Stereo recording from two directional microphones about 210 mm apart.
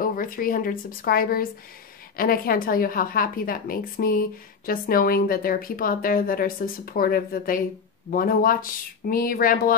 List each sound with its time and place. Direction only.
0.0 s speech: 40° left (ahead or behind)